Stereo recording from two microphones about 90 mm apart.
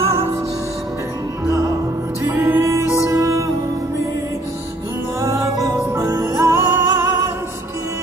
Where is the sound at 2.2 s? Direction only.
25° right (ahead or behind).